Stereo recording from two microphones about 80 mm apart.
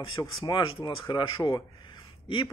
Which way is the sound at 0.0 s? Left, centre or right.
Left.